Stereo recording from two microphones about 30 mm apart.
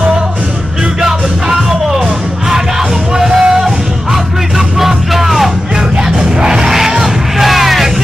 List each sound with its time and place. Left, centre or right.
1.0 s music: centre
3.3 s music: centre
6.1 s music: right
6.9 s music: centre